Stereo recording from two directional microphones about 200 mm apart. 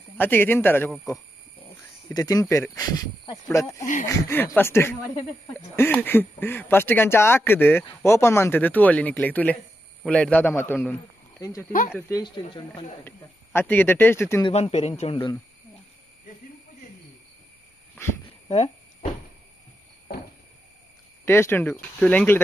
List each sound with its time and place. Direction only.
0.2 s speech: 10° left (ahead or behind)
2.0 s a man's voice: 20° left (ahead or behind)
14.4 s speech: 30° left (ahead or behind)
21.3 s speech: 10° left (ahead or behind)